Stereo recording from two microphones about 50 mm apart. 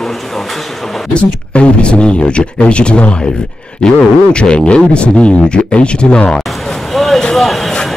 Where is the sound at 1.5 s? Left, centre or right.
Left.